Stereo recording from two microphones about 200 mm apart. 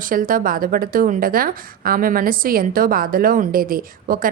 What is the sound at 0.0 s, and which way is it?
A woman's voice, 45° right (ahead or behind).